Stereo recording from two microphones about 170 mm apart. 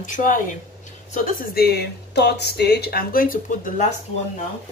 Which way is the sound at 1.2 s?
65° left (ahead or behind).